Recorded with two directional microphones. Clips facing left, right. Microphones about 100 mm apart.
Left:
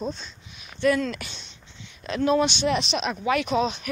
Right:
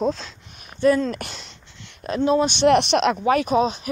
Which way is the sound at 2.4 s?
60° right (ahead or behind).